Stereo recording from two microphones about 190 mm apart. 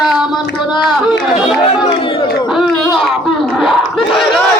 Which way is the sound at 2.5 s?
Centre (ahead or behind).